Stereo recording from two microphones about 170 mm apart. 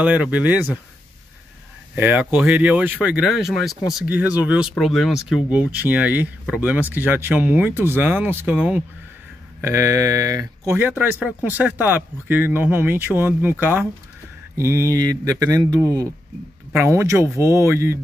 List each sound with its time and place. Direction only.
0.0 s speech: 10° right (ahead or behind)
2.0 s speech: 10° right (ahead or behind)